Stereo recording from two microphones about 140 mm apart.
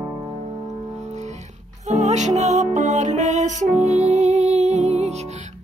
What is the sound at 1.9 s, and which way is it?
Music, 55° right (ahead or behind).